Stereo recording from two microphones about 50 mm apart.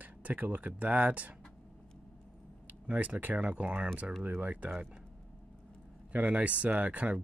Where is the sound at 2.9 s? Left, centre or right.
Right.